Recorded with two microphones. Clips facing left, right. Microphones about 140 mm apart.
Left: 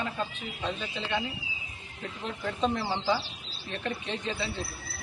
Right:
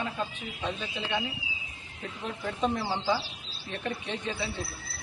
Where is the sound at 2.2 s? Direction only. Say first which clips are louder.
Even; 15° right (ahead or behind).